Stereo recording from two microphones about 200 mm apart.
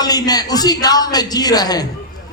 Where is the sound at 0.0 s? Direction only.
20° left (ahead or behind).